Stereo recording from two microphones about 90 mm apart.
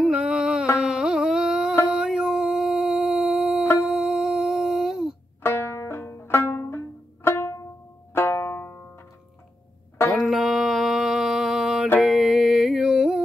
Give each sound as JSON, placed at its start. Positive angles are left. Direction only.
{"t": 0.0, "sound": "a sound", "side_deg": -5}
{"t": 0.7, "sound": "carnatic music", "side_deg": -5}
{"t": 1.9, "sound": "a sound", "side_deg": -5}
{"t": 3.8, "sound": "humming", "side_deg": -5}
{"t": 5.4, "sound": "banjo", "side_deg": 25}
{"t": 7.2, "sound": "music", "side_deg": 25}
{"t": 8.1, "sound": "banjo", "side_deg": 25}
{"t": 10.1, "sound": "a sound", "side_deg": -5}
{"t": 12.0, "sound": "music", "side_deg": -5}